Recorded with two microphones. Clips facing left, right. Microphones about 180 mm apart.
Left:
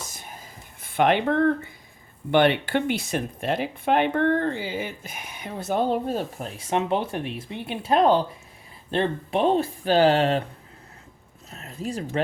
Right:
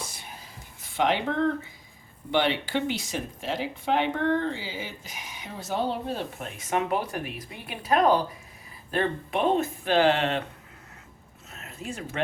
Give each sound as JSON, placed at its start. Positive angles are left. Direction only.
{"t": 0.1, "sound": "whispering", "side_deg": 45}
{"t": 0.8, "sound": "speech", "side_deg": 55}
{"t": 11.5, "sound": "speech", "side_deg": 35}